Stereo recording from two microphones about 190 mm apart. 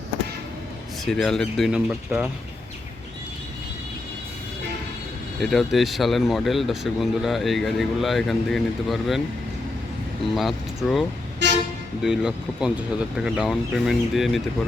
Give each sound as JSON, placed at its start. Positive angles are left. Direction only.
{"t": 1.0, "sound": "speech", "side_deg": 5}
{"t": 5.4, "sound": "speech", "side_deg": 0}
{"t": 10.8, "sound": "speech", "side_deg": 0}
{"t": 11.4, "sound": "speech", "side_deg": -70}
{"t": 12.0, "sound": "speech", "side_deg": -5}